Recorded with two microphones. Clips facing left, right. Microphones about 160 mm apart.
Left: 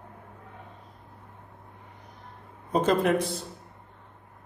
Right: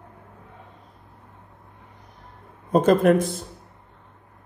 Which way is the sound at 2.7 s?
50° right (ahead or behind).